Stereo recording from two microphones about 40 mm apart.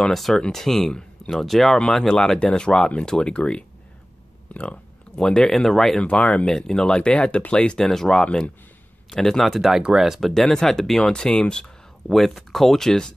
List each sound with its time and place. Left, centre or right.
0.0 s speech: centre
2.0 s speech: centre
4.6 s a sound: left
5.2 s speech: centre
5.9 s speech: left
6.5 s speech: centre
7.9 s speech: centre
8.2 s speech: left
9.4 s speech: centre
9.8 s speech: centre
10.4 s speech: centre
12.5 s speech: centre